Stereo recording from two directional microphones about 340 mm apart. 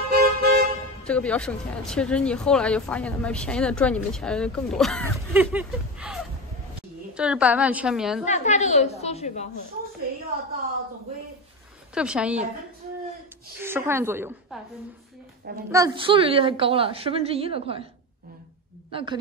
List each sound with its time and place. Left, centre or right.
0.1 s vehicle: right
1.0 s speech: centre
8.3 s a woman's voice: centre
11.9 s speech: centre
13.6 s a woman's voice: centre
15.7 s a woman's voice: centre
18.9 s a man's voice: centre